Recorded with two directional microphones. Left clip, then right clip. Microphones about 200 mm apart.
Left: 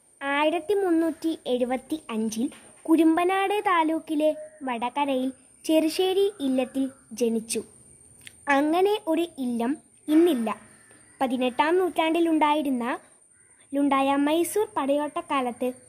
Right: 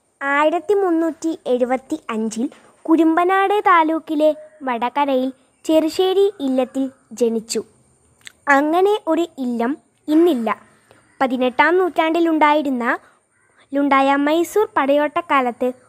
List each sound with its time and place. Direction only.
0.2 s a woman's voice: 15° right (ahead or behind)